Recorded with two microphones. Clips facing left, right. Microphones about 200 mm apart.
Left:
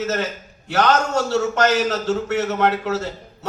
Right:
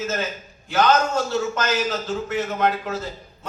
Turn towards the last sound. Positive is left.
turn(degrees=75)  # may be behind; listen again after turning